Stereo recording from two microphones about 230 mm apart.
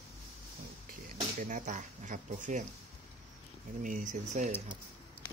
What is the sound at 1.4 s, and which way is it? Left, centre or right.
Speech, right.